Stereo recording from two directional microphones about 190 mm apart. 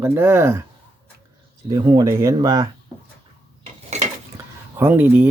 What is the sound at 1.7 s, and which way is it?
Speech, 20° right (ahead or behind).